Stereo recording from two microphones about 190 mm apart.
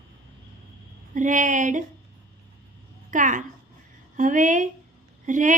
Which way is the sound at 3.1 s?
40° right (ahead or behind).